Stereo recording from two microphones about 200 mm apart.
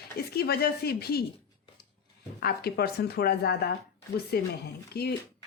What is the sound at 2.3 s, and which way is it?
A woman's voice, 50° left (ahead or behind).